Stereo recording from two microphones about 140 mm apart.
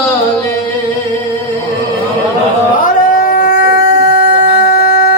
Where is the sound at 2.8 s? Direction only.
70° left (ahead or behind).